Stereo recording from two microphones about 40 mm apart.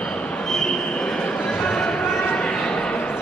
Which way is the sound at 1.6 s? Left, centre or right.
Left.